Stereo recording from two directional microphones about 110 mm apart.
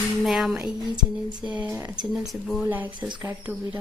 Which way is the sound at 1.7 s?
25° right (ahead or behind).